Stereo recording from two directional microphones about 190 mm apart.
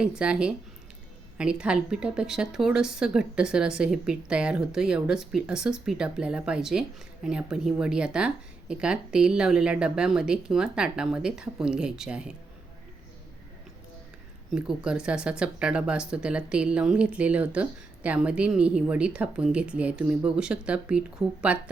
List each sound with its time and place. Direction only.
0.0 s speech: 5° right (ahead or behind)
14.5 s speech: 5° right (ahead or behind)